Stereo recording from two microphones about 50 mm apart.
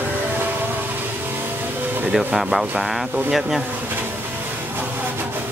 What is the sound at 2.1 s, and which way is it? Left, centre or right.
Speech, centre.